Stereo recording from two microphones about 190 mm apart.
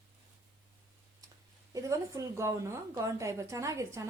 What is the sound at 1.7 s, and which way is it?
A woman's voice, 15° right (ahead or behind).